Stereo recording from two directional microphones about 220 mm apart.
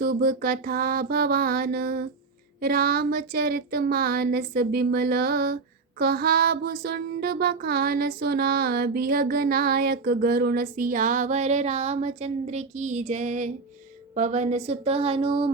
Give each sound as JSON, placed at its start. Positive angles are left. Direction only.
{"t": 0.0, "sound": "music", "side_deg": -40}
{"t": 2.6, "sound": "child singing", "side_deg": -40}
{"t": 14.2, "sound": "a woman's voice", "side_deg": -35}